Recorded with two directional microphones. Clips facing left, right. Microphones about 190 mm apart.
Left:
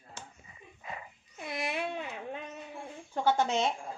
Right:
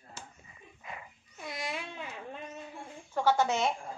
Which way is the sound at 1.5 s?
60° left (ahead or behind).